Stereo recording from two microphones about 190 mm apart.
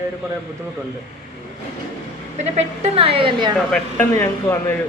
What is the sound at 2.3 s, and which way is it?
A woman's voice, 35° right (ahead or behind).